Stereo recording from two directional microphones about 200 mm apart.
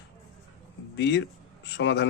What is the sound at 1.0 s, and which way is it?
Speech, 60° left (ahead or behind).